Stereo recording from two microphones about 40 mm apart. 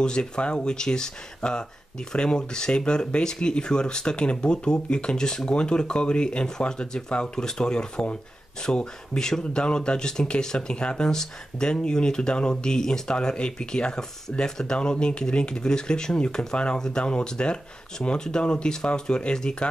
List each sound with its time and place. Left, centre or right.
0.0 s speech: left